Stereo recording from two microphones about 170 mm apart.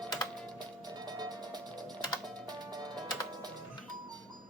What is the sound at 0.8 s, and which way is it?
Music, 25° right (ahead or behind).